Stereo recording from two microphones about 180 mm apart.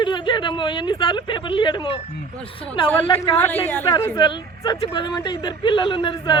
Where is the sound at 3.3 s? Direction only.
10° left (ahead or behind).